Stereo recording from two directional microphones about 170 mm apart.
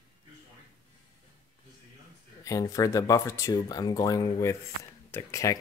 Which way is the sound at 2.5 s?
20° left (ahead or behind).